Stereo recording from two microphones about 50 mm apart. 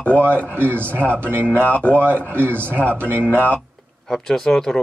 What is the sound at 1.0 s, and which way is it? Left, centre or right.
Speech, centre.